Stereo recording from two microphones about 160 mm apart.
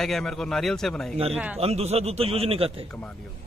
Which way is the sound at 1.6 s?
40° right (ahead or behind).